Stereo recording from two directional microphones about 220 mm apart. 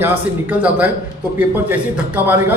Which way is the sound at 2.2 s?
10° right (ahead or behind).